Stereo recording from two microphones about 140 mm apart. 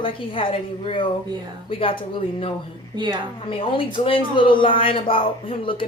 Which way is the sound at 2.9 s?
30° right (ahead or behind).